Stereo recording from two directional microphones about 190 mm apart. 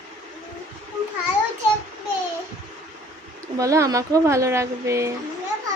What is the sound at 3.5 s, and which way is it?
Speech, 15° right (ahead or behind).